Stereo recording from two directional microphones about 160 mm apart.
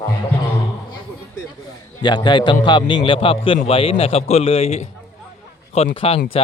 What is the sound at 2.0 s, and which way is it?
A man's voice, 25° left (ahead or behind).